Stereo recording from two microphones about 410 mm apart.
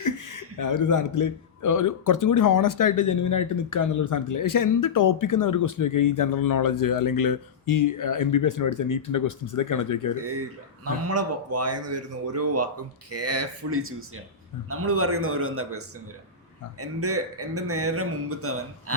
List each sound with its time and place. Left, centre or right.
0.0 s speech: left
10.8 s speech: right
16.8 s speech: right